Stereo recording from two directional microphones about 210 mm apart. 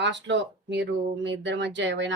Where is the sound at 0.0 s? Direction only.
55° right (ahead or behind).